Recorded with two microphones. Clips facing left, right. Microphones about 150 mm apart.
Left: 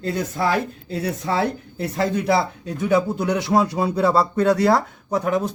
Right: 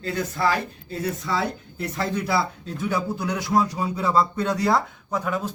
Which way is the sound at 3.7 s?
70° left (ahead or behind).